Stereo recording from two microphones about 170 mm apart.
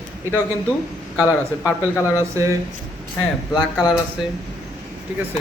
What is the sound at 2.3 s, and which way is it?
Speech, 15° right (ahead or behind).